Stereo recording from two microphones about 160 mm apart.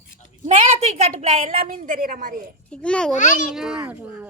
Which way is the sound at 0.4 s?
40° right (ahead or behind).